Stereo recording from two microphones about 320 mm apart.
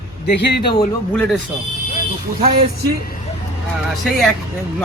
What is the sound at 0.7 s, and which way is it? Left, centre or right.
Speech, centre.